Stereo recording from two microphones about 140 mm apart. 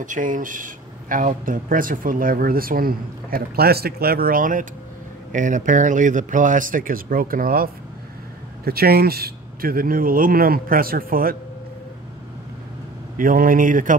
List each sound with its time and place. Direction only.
0.0 s speech: 70° right (ahead or behind); by 11.3 s 90° right
13.2 s speech: 80° right